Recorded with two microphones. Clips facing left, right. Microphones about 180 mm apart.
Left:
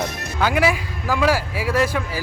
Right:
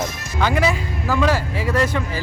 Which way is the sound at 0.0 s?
60° left (ahead or behind).